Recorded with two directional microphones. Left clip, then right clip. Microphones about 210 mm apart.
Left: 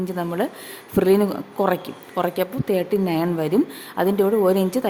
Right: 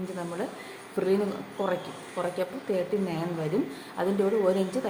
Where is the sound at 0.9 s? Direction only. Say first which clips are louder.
Left 9 dB; 50° left (ahead or behind).